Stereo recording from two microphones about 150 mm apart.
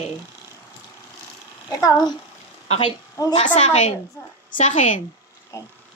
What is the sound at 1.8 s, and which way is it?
Speech, 20° left (ahead or behind).